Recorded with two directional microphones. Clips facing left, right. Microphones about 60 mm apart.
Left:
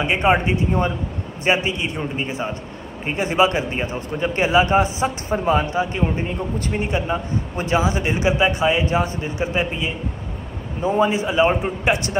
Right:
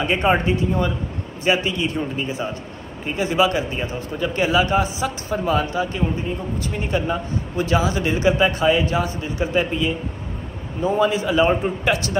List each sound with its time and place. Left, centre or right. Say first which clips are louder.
0.0 s a man's voice: left 1 dB; centre; by 6.8 s left
6.8 s speech: right 2 dB; left
8.8 s speech: left 1 dB; left